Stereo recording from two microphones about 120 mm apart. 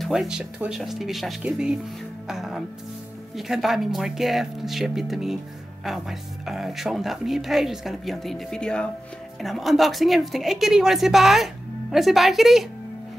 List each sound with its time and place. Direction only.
0.0 s speech: 5° right (ahead or behind)